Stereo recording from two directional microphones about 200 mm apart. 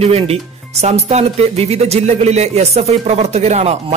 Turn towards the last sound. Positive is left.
turn(degrees=-35)  # may be behind; listen again after turning